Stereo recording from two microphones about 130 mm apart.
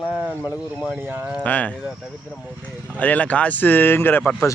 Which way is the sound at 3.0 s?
10° left (ahead or behind).